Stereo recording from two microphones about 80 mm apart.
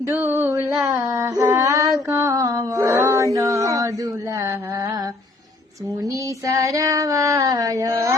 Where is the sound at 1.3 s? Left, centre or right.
Right.